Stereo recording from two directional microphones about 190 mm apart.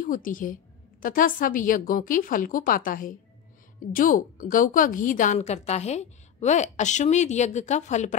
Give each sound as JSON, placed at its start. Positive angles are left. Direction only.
{"t": 0.0, "sound": "a woman's voice", "side_deg": 45}